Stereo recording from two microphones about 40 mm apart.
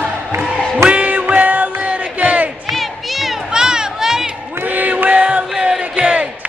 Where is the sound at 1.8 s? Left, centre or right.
Right.